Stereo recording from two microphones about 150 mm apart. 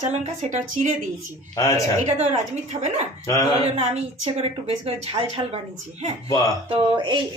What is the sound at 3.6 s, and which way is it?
Speech, 40° right (ahead or behind).